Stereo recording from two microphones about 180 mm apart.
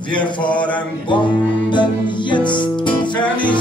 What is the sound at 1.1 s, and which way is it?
Music, 25° left (ahead or behind).